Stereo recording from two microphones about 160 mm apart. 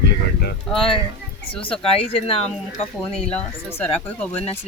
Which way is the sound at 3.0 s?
5° left (ahead or behind).